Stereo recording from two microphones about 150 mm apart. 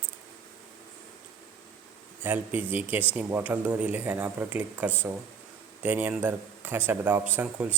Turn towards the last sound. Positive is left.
turn(degrees=-10)  # may be behind; listen again after turning